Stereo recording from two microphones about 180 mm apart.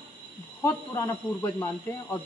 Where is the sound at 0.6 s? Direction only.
20° left (ahead or behind).